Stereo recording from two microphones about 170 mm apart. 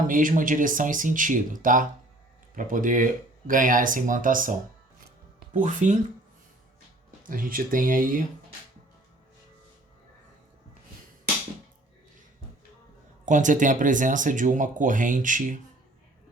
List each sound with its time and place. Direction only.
0.1 s speech: 50° right (ahead or behind)
5.5 s speech: 45° right (ahead or behind)
7.3 s speech: 55° right (ahead or behind)
13.2 s speech: 50° right (ahead or behind)